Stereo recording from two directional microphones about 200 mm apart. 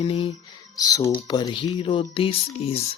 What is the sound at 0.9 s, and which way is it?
Speech, 15° left (ahead or behind).